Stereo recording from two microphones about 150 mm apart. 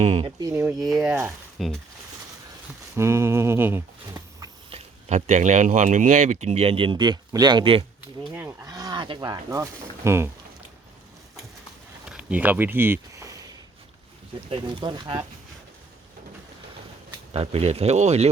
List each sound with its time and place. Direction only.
0.0 s speech: 40° right (ahead or behind)
0.3 s speech: 20° right (ahead or behind)
1.5 s speech: centre (ahead or behind)
2.9 s speech: 20° right (ahead or behind)
4.7 s speech: 50° right (ahead or behind); by 7.9 s 35° right (ahead or behind)
8.3 s speech: 15° right (ahead or behind)
12.0 s a sound: 10° right (ahead or behind)
14.5 s speech: 30° right (ahead or behind)
17.3 s speech: 40° right (ahead or behind)